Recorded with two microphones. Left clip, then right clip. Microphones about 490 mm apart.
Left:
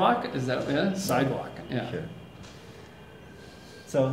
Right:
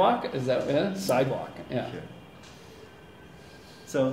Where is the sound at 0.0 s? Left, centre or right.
Right.